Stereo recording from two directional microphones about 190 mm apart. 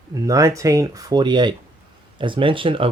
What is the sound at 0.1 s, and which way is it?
Speech, 15° right (ahead or behind).